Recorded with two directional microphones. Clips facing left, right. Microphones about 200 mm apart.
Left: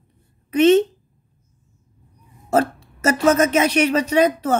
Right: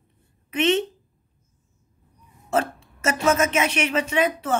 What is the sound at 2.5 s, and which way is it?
Speech, 40° left (ahead or behind).